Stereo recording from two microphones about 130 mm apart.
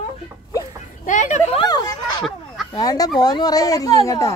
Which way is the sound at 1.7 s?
30° left (ahead or behind).